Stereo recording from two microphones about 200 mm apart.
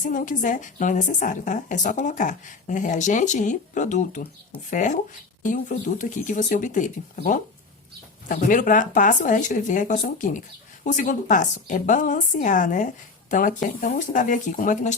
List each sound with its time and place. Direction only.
0.0 s a woman's voice: 40° left (ahead or behind)